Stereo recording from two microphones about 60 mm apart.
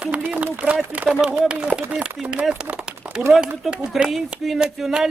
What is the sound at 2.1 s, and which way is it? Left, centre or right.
A man's voice, centre.